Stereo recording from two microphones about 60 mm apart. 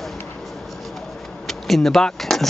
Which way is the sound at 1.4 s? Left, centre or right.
Centre.